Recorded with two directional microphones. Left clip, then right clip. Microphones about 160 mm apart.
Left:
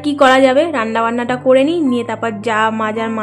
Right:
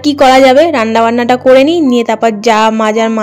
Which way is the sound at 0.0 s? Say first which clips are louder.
Right 5 dB; 35° right (ahead or behind).